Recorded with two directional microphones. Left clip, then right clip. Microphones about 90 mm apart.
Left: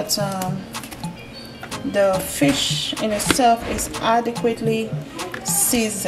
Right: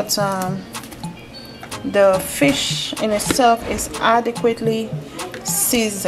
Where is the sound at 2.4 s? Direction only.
25° right (ahead or behind).